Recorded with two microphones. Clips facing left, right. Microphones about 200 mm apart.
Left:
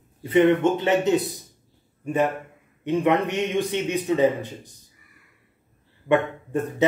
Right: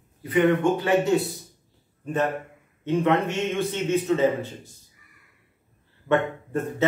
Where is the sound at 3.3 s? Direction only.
15° left (ahead or behind).